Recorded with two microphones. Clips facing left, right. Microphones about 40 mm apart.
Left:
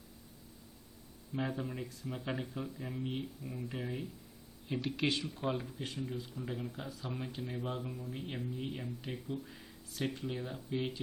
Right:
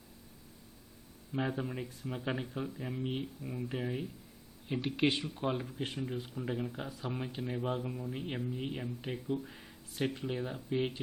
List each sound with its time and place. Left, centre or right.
1.3 s speech: centre
6.0 s speech: right
6.3 s speech: right